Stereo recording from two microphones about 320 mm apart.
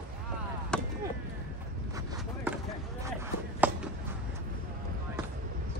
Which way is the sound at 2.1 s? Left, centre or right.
Centre.